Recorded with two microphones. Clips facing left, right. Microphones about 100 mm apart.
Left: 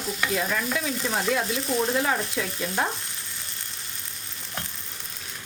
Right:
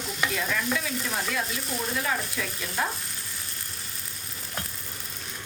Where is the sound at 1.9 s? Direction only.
30° left (ahead or behind).